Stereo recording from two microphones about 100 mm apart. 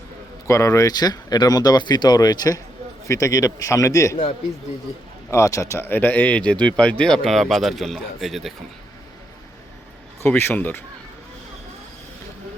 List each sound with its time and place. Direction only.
0.4 s speech: 30° left (ahead or behind)
5.3 s speech: 30° left (ahead or behind); by 8.5 s centre (ahead or behind)
10.2 s speech: 20° left (ahead or behind)